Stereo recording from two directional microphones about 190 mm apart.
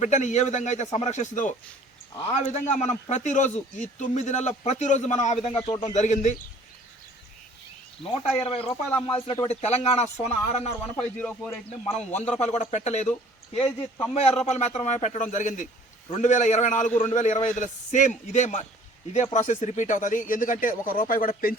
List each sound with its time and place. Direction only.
0.0 s speech: 40° left (ahead or behind)
8.4 s speech: 30° left (ahead or behind)
11.2 s a man's voice: 5° left (ahead or behind)
11.9 s speech: 35° left (ahead or behind)